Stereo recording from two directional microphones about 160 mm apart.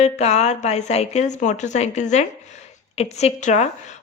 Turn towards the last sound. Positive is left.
turn(degrees=45)  # may be behind; listen again after turning